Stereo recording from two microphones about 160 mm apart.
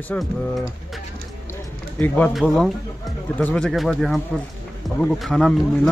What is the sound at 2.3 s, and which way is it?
Speech, centre (ahead or behind).